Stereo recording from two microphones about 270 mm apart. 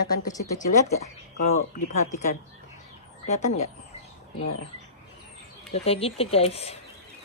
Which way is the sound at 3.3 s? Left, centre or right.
Left.